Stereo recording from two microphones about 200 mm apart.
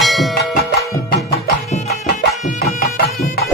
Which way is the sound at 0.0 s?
Centre (ahead or behind).